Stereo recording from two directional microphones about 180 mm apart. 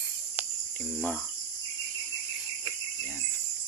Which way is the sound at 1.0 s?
10° left (ahead or behind).